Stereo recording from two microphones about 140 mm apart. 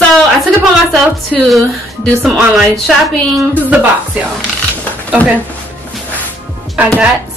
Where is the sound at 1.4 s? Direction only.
Centre (ahead or behind).